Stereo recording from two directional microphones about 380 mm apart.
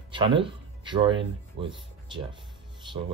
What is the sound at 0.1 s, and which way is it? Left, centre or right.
Speech, centre.